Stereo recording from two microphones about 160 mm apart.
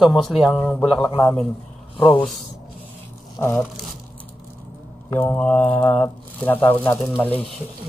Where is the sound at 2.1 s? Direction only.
Centre (ahead or behind).